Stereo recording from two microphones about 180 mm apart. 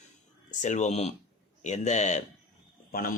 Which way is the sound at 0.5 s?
40° left (ahead or behind).